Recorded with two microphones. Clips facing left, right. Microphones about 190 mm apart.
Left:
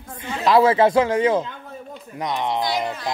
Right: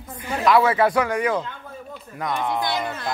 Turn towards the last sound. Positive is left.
turn(degrees=20)  # may be behind; listen again after turning